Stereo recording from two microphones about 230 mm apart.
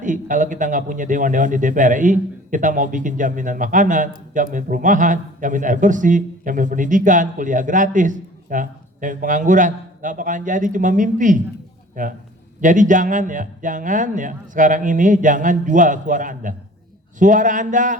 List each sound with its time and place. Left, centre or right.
0.0 s speech: right